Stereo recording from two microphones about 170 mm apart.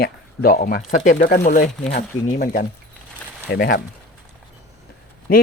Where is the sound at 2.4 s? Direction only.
60° left (ahead or behind).